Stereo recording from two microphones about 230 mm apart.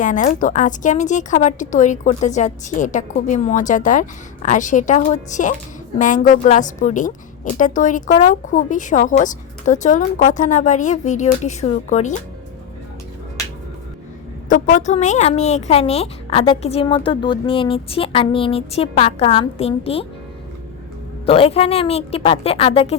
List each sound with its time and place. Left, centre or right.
0.0 s a woman's voice: left
14.5 s speech: left
21.2 s speech: left